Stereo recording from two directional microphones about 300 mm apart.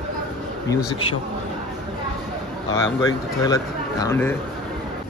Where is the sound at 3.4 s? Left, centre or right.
Centre.